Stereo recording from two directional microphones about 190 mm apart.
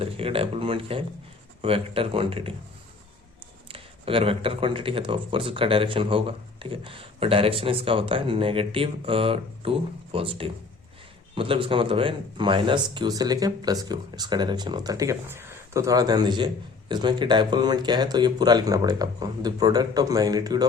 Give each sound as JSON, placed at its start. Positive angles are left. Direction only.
{"t": 0.0, "sound": "speech", "side_deg": -30}
{"t": 3.7, "sound": "speech", "side_deg": -30}